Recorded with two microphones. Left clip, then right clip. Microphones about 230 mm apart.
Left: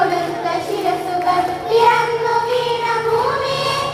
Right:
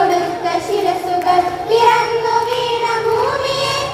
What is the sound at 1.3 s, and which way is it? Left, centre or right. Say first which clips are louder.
Child singing: right 2 dB; right.